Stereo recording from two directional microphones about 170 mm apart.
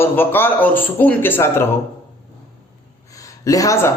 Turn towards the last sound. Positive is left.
turn(degrees=20)  # may be behind; listen again after turning